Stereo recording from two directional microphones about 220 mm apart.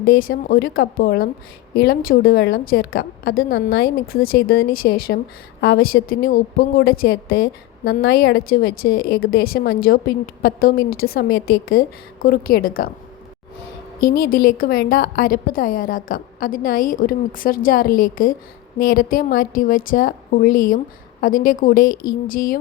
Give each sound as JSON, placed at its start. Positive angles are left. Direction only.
{"t": 0.0, "sound": "a woman's voice", "side_deg": 40}
{"t": 14.1, "sound": "a woman's voice", "side_deg": 40}